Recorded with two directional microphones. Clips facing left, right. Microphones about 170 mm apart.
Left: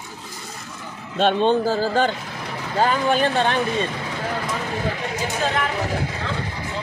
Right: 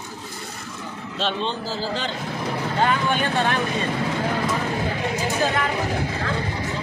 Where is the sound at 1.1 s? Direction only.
50° left (ahead or behind).